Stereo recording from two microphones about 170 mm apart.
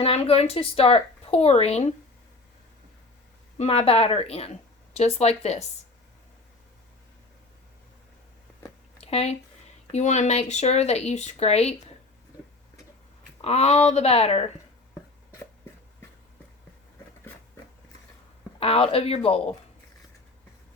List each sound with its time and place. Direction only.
0.0 s speech: 35° left (ahead or behind)
3.6 s speech: 35° left (ahead or behind)
9.0 s a sound: 35° left (ahead or behind)
9.9 s speech: 45° left (ahead or behind)
13.4 s speech: 40° left (ahead or behind)
18.6 s speech: 35° left (ahead or behind)